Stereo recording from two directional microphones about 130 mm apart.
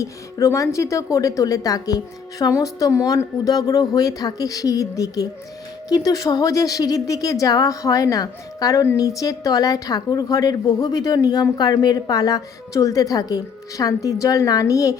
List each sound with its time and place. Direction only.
0.0 s speech: 25° left (ahead or behind)